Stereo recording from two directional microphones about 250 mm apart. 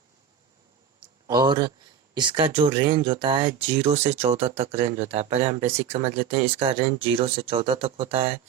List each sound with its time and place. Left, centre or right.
1.3 s speech: centre